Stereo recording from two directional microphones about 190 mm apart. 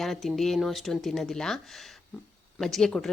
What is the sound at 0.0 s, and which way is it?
A woman's voice, centre (ahead or behind).